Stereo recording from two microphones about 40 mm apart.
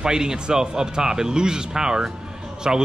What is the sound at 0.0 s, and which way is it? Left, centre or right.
A man's voice, centre.